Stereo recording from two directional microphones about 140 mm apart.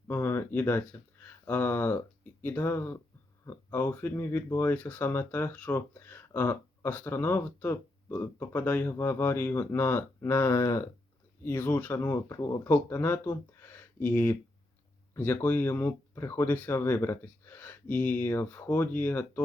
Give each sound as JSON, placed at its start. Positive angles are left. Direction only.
{"t": 0.1, "sound": "speech", "side_deg": 15}